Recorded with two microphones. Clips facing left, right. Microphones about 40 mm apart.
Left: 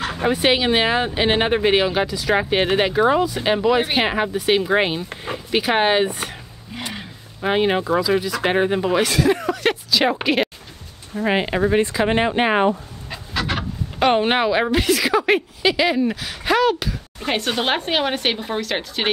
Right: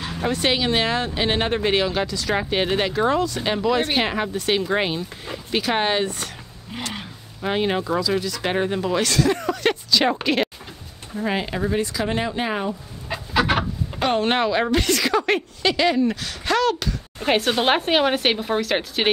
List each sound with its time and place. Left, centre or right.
0.2 s speech: centre
7.4 s speech: centre
11.2 s speech: left
13.1 s a sound: centre
13.9 s speech: centre
17.2 s speech: centre